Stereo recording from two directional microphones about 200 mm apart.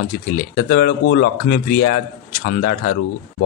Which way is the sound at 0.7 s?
50° left (ahead or behind).